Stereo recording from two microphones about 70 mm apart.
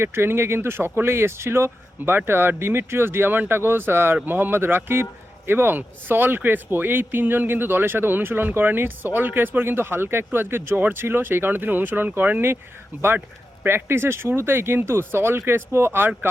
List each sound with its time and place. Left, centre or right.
0.0 s speech: right
13.7 s speech: right